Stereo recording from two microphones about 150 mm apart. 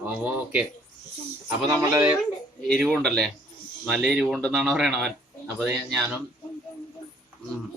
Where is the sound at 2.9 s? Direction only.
5° left (ahead or behind).